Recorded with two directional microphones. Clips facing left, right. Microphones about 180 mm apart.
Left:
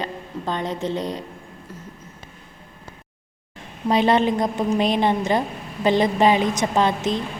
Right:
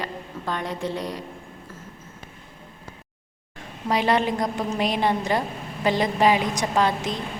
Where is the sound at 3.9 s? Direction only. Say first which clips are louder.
Left 4 dB; 25° left (ahead or behind).